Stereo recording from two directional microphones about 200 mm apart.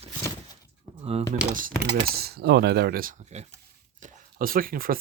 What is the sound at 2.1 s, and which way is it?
Speech, 50° right (ahead or behind).